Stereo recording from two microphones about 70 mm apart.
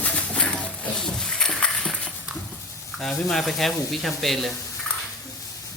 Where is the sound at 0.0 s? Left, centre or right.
Left; by 2.1 s centre.